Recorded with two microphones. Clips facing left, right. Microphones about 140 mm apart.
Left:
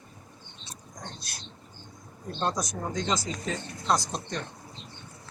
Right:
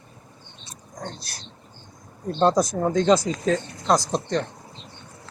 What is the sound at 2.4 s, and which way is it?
Speech, 60° right (ahead or behind).